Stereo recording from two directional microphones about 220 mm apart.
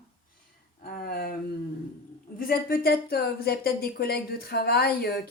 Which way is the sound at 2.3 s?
40° left (ahead or behind).